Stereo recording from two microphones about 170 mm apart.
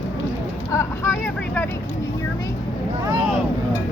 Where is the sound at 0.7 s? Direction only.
15° left (ahead or behind).